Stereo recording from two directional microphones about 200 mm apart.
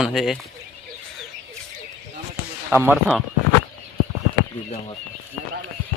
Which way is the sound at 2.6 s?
10° right (ahead or behind).